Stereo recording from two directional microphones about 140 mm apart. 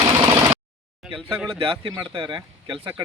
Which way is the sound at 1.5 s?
40° right (ahead or behind).